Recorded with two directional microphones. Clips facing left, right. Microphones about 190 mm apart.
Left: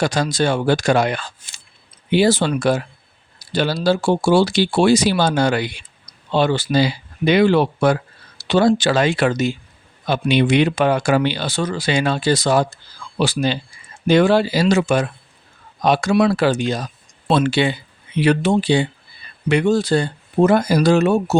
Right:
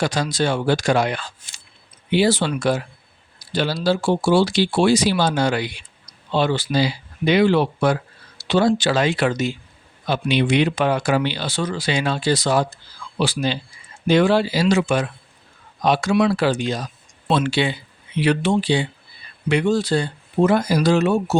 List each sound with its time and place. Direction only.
0.0 s speech: 45° left (ahead or behind)